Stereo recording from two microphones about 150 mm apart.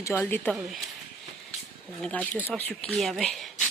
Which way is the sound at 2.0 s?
10° left (ahead or behind).